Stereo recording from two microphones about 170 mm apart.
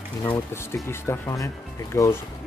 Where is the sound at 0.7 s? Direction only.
15° left (ahead or behind).